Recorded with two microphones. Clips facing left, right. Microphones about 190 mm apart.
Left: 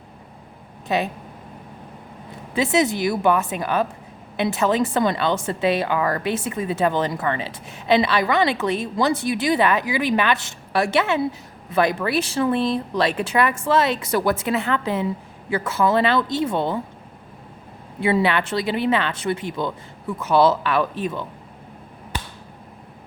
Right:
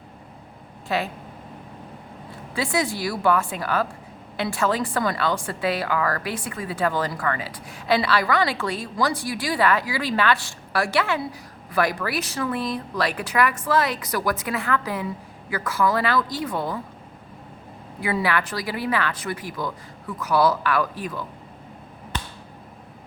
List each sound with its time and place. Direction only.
0.9 s speech: 20° left (ahead or behind)
2.6 s a woman's voice: 20° left (ahead or behind)
18.0 s a woman's voice: 25° left (ahead or behind)